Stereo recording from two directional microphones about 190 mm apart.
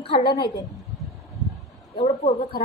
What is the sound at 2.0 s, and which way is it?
Speech, 30° left (ahead or behind).